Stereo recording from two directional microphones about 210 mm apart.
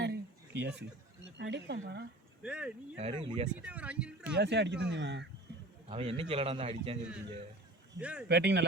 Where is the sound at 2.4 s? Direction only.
5° right (ahead or behind).